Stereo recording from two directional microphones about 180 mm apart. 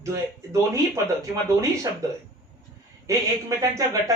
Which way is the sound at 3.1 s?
15° right (ahead or behind).